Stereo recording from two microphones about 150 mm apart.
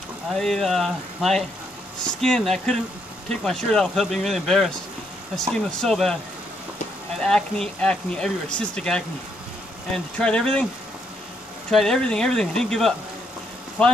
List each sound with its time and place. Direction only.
0.3 s speech: 5° left (ahead or behind)
7.2 s speech: 5° left (ahead or behind)
10.1 s speech: 5° left (ahead or behind)
11.7 s speech: 5° left (ahead or behind)